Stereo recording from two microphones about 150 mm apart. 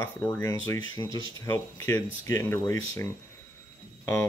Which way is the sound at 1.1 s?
35° right (ahead or behind).